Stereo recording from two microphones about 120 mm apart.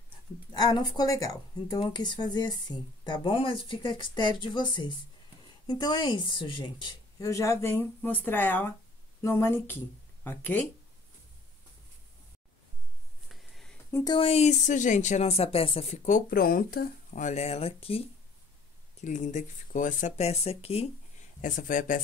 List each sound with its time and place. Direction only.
0.5 s speech: 35° left (ahead or behind)
7.2 s speech: 25° left (ahead or behind)
13.3 s a sound: centre (ahead or behind)
14.2 s speech: 60° left (ahead or behind)
17.1 s speech: 80° left; by 18.0 s 55° left (ahead or behind)
18.9 s speech: 85° left; by 20.9 s 55° left (ahead or behind)
21.4 s speech: 90° left